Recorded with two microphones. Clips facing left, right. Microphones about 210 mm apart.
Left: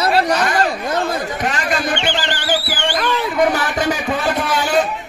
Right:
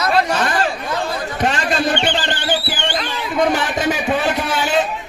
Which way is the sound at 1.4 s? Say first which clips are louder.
Right 5 dB; 30° right (ahead or behind).